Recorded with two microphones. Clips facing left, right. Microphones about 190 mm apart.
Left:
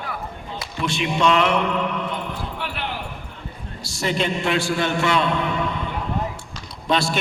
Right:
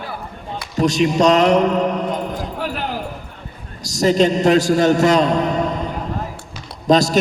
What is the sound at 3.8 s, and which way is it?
A man's voice, 40° right (ahead or behind).